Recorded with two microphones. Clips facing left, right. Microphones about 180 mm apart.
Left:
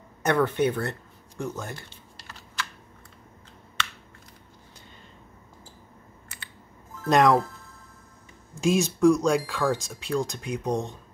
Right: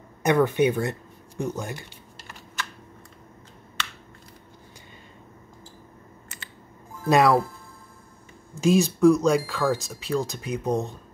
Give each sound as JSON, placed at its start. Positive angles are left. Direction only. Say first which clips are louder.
{"t": 0.2, "sound": "speech", "louder": "right 3 dB", "side_deg": -15}
{"t": 7.0, "sound": "speech", "louder": "right 1 dB", "side_deg": -10}
{"t": 8.5, "sound": "speech", "louder": "right 3 dB", "side_deg": 0}